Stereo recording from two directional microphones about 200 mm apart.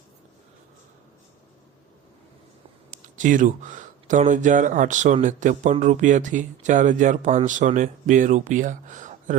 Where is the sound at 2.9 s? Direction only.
40° right (ahead or behind).